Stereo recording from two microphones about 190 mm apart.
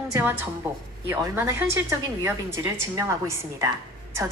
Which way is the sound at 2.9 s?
15° right (ahead or behind).